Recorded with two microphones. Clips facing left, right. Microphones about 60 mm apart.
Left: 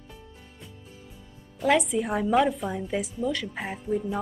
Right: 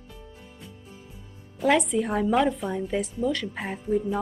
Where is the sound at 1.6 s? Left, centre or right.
Centre.